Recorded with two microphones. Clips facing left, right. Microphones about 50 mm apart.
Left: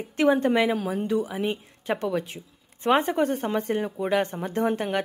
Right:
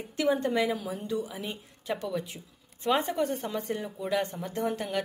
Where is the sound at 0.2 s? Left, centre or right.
Left.